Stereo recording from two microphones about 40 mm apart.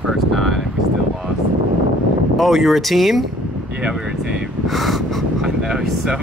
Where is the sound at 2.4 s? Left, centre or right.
Centre.